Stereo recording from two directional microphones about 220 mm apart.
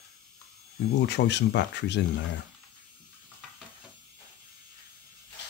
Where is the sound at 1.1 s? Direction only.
50° left (ahead or behind).